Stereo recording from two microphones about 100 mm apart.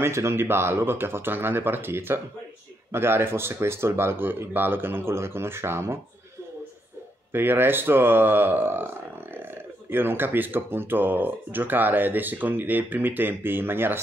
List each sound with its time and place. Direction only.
0.0 s speech: 25° right (ahead or behind)
7.3 s speech: 20° right (ahead or behind)